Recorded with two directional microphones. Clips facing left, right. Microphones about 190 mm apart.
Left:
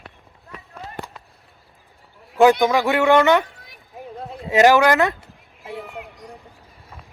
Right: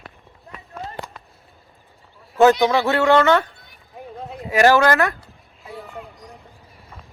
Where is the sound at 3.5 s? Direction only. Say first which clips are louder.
Left 2 dB; 90° left.